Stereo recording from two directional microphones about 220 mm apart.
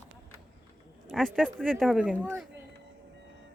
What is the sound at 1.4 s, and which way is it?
Speech, centre (ahead or behind).